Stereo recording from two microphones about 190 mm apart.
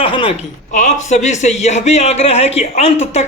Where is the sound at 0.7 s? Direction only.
40° left (ahead or behind).